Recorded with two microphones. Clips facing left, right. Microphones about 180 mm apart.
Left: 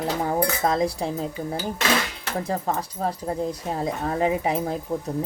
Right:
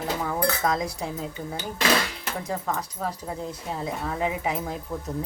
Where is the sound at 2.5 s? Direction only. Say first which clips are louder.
Left 2 dB; 30° left (ahead or behind).